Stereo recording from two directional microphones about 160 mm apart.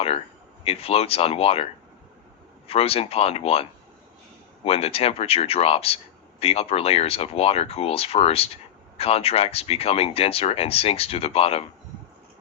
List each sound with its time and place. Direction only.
0.6 s speech: 40° left (ahead or behind)
2.6 s speech: 40° left (ahead or behind)